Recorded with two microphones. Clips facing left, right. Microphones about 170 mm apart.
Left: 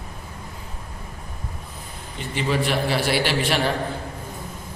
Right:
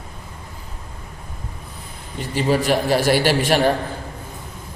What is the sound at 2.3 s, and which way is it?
A man's voice, 40° right (ahead or behind).